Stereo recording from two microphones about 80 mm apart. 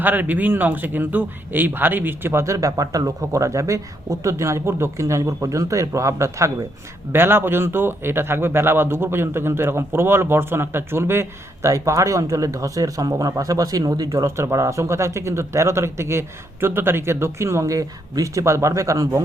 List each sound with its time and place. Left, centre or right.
0.0 s speech: right
7.1 s speech: right